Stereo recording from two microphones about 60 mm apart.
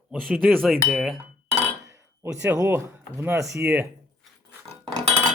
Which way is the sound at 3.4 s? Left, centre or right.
Right.